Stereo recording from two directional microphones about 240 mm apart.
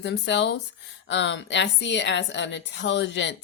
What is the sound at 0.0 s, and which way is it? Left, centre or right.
Speech, left.